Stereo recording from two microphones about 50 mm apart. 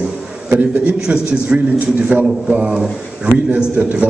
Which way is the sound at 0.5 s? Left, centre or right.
Right.